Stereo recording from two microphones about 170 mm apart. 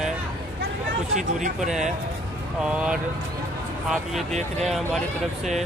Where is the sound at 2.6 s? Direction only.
5° right (ahead or behind).